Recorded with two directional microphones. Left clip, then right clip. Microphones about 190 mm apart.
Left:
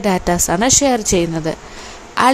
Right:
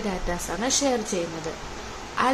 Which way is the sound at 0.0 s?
60° left (ahead or behind).